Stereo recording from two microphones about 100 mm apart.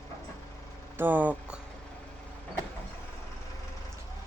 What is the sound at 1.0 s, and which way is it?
Speech, 15° right (ahead or behind).